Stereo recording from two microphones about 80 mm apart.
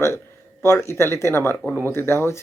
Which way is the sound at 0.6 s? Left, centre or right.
Left.